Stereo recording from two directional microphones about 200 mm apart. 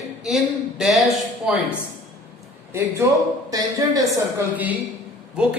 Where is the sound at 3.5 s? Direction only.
20° right (ahead or behind).